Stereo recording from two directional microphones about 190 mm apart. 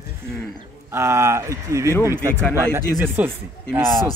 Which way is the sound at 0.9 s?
15° right (ahead or behind).